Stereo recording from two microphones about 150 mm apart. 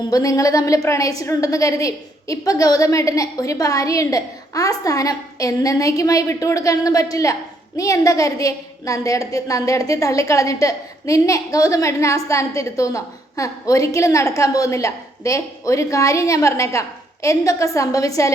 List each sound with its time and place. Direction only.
0.1 s a woman's voice: 20° left (ahead or behind)